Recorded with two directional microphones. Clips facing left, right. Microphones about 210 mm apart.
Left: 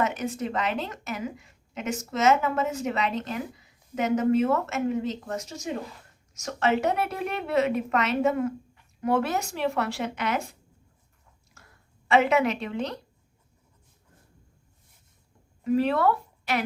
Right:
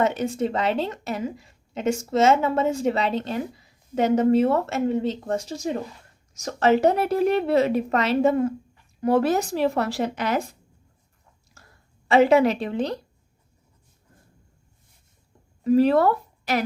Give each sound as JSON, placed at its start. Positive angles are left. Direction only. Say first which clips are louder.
{"t": 0.0, "sound": "a woman's voice", "louder": "right 5 dB", "side_deg": -30}
{"t": 12.0, "sound": "a woman's voice", "louder": "right 5 dB", "side_deg": -35}
{"t": 15.6, "sound": "speech", "louder": "right 5 dB", "side_deg": -35}